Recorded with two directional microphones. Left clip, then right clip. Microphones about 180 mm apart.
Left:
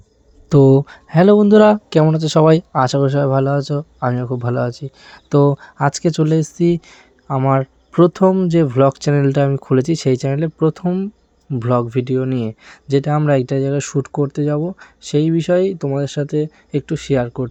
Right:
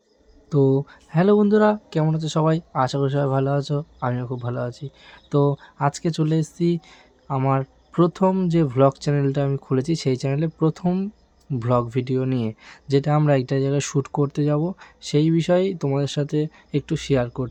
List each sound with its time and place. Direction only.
0.5 s speech: 45° left (ahead or behind)
1.5 s speech: 55° left (ahead or behind); by 10.8 s 15° left (ahead or behind)
10.8 s speech: 5° left (ahead or behind)